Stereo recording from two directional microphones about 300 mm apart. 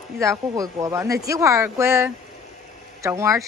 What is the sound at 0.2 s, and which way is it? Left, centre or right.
Speech, centre.